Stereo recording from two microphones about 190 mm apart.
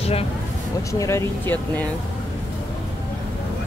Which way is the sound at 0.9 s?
15° left (ahead or behind).